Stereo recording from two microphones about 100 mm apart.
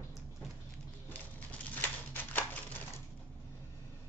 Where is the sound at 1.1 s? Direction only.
15° left (ahead or behind).